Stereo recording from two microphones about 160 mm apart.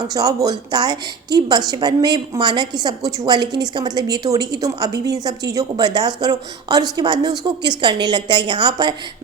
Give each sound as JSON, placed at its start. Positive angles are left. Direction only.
{"t": 0.1, "sound": "a woman's voice", "side_deg": -25}